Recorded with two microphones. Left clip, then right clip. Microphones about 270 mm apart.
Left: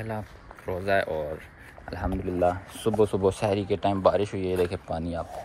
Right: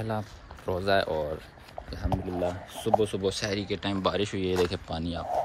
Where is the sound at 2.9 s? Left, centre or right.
Centre.